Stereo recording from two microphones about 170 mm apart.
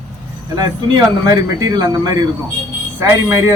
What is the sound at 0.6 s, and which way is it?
A man's voice, 20° right (ahead or behind).